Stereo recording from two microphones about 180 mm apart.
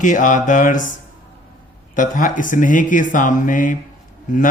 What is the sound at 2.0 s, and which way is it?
A man's voice, 45° left (ahead or behind).